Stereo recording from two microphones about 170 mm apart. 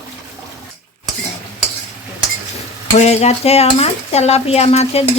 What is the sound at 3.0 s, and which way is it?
Cutlery, 40° left (ahead or behind).